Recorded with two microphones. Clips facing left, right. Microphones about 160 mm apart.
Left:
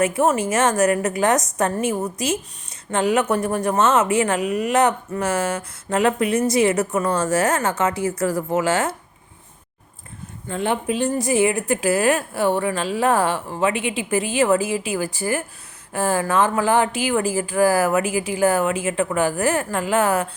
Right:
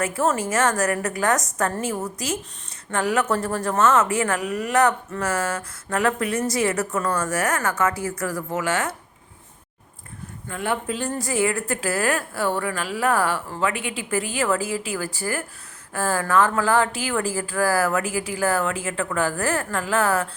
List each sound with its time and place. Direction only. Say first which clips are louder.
0.0 s speech: left 4 dB; 20° left (ahead or behind)
10.5 s speech: left 4 dB; 25° left (ahead or behind)